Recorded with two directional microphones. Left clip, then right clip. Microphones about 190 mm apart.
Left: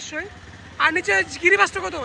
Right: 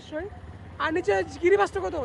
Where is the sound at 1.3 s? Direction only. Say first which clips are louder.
Left 5 dB; 55° right (ahead or behind).